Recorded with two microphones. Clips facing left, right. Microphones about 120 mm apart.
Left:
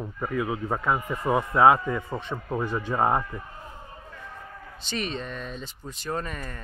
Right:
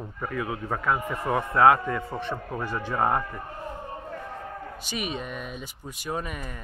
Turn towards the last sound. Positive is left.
turn(degrees=-10)  # may be behind; listen again after turning